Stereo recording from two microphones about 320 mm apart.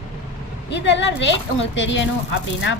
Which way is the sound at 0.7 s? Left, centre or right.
Left.